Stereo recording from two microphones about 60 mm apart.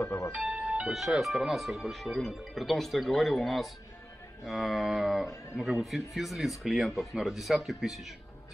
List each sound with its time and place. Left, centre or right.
0.3 s music: centre
0.9 s speech: centre